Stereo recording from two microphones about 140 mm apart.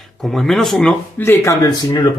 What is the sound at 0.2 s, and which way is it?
Speech, centre (ahead or behind).